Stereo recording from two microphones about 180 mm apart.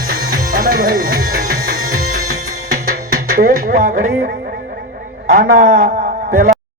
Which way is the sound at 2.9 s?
55° right (ahead or behind).